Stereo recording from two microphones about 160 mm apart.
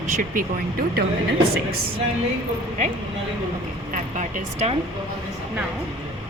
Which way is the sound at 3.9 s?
50° right (ahead or behind).